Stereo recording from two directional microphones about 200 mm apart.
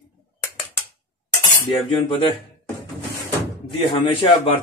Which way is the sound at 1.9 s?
25° left (ahead or behind).